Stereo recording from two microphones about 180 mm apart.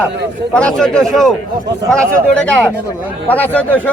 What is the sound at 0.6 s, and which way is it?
Speech, 5° left (ahead or behind).